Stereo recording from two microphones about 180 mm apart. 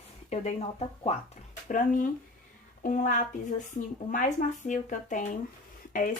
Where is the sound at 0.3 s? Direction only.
35° left (ahead or behind).